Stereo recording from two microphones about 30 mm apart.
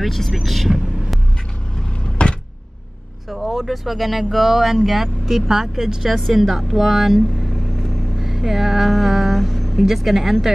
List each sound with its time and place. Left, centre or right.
0.3 s speech: centre
2.2 s a sound: left
3.3 s speech: centre
7.3 s vehicle: centre
9.8 s speech: centre